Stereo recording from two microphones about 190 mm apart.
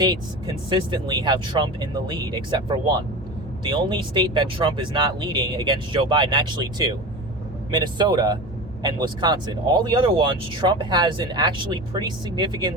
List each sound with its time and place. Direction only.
0.0 s speech: 20° right (ahead or behind)